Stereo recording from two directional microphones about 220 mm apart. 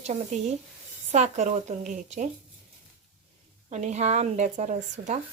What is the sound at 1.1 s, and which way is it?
Speech, 30° right (ahead or behind).